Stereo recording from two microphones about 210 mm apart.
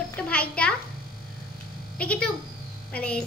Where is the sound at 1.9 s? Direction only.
5° left (ahead or behind).